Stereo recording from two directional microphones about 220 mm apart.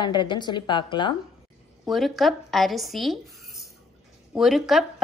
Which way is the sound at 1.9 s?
Centre (ahead or behind).